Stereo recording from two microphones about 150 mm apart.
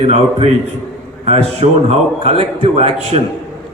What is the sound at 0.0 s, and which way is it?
A man's voice, 45° right (ahead or behind).